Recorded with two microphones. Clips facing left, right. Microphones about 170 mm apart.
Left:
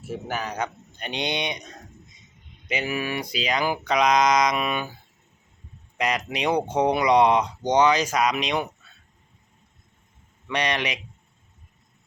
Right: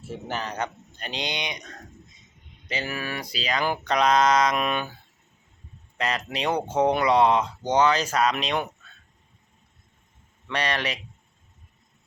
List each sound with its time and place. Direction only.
0.1 s speech: 10° left (ahead or behind)
1.0 s speech: 25° left (ahead or behind)
2.6 s speech: 10° left (ahead or behind)
6.0 s speech: 15° left (ahead or behind)
10.5 s speech: 15° left (ahead or behind)